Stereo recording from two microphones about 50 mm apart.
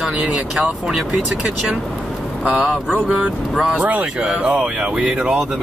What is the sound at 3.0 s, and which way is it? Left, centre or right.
Speech, right.